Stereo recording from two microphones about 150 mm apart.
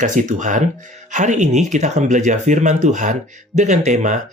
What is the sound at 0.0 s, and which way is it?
Speech, 55° right (ahead or behind).